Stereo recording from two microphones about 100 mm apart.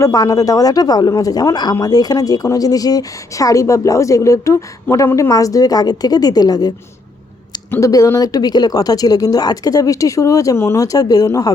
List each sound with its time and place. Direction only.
0.0 s speech: 35° left (ahead or behind)
7.8 s speech: 35° left (ahead or behind)